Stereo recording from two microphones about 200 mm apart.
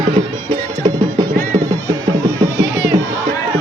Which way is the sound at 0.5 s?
20° right (ahead or behind).